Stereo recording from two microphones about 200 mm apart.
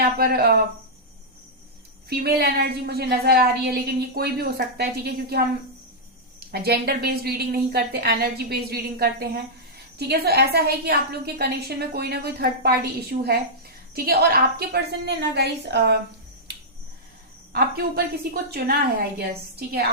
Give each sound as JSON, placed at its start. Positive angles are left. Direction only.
{"t": 0.0, "sound": "a woman's voice", "side_deg": -50}
{"t": 2.0, "sound": "a woman's voice", "side_deg": -50}
{"t": 6.5, "sound": "a woman's voice", "side_deg": -50}
{"t": 16.5, "sound": "finger snapping", "side_deg": -55}
{"t": 17.5, "sound": "a woman's voice", "side_deg": -50}